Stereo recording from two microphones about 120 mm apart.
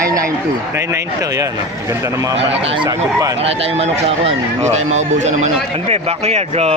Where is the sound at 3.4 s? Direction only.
55° right (ahead or behind).